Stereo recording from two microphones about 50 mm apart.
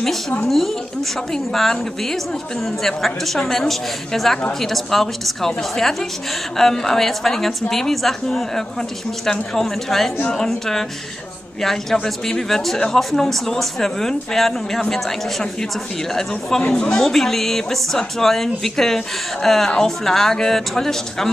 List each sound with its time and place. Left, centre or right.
0.5 s a woman's voice: centre